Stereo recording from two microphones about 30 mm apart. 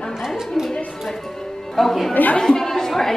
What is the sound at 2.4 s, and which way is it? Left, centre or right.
Chatter, centre.